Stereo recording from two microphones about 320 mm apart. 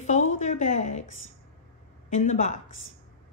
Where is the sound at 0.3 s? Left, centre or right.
Left.